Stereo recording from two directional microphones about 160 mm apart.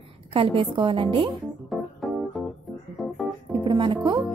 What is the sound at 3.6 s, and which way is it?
Speech, 30° right (ahead or behind).